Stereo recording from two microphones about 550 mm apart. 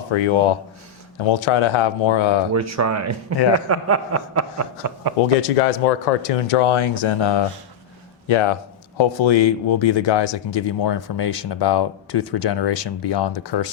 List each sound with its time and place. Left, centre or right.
0.1 s speech: left
2.5 s a man's voice: right
5.4 s speech: left